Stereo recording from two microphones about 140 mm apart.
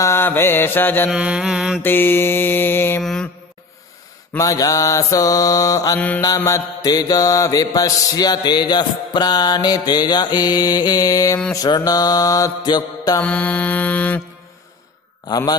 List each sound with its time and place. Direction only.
0.0 s mantra: 15° left (ahead or behind)
1.1 s mantra: 5° right (ahead or behind)
1.8 s mantra: 15° left (ahead or behind)
3.0 s mantra: 5° left (ahead or behind)
4.4 s mantra: 25° left (ahead or behind)
5.9 s mantra: 10° left (ahead or behind)
6.2 s mantra: 25° left (ahead or behind)
13.2 s mantra: 10° left (ahead or behind)
15.2 s mantra: 30° left (ahead or behind)